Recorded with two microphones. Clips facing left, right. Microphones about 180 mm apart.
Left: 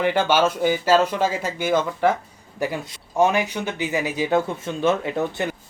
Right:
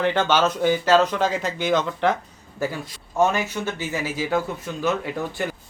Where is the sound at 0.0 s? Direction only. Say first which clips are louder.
Left 1 dB; 10° left (ahead or behind).